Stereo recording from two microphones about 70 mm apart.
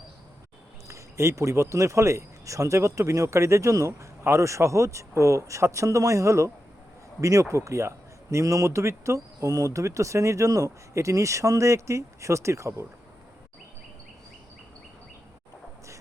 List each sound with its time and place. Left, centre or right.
0.9 s speech: right